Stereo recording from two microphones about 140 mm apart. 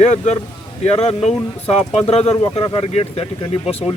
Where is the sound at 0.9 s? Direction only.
45° left (ahead or behind).